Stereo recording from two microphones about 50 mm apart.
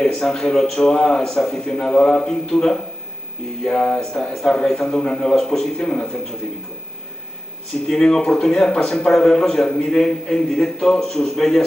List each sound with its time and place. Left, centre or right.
0.0 s a man's voice: centre
5.8 s a man's voice: centre
7.9 s a man's voice: centre